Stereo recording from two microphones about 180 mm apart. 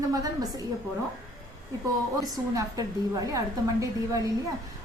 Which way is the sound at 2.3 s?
20° right (ahead or behind).